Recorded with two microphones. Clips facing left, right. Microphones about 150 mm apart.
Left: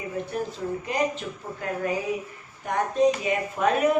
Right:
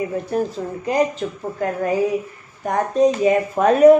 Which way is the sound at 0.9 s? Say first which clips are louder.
Right 9 dB; 40° right (ahead or behind).